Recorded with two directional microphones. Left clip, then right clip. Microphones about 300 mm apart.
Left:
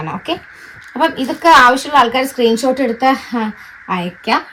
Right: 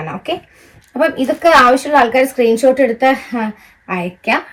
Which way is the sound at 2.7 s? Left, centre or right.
Left.